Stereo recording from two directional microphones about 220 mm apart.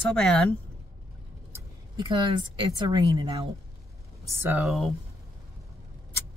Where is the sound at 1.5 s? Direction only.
20° right (ahead or behind).